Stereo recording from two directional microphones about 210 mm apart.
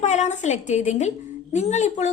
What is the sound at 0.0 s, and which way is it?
A woman's voice, 35° left (ahead or behind).